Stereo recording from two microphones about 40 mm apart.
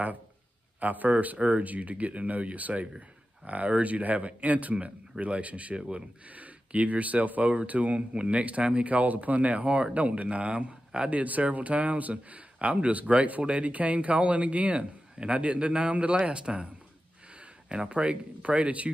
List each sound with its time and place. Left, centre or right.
0.7 s speech: right
17.6 s speech: right